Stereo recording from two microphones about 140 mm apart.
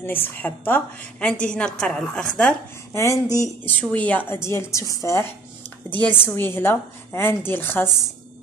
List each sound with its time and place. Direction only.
0.0 s a woman's voice: 15° left (ahead or behind)
2.9 s speech: 20° left (ahead or behind)
3.9 s a woman's voice: 10° left (ahead or behind)